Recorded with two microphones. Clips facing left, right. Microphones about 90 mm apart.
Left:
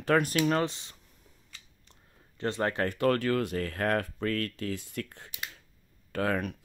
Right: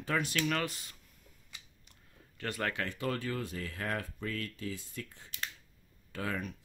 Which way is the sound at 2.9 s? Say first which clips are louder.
Left 9 dB; 65° left (ahead or behind).